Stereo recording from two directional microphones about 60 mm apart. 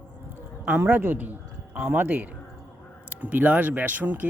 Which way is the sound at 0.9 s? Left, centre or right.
Right.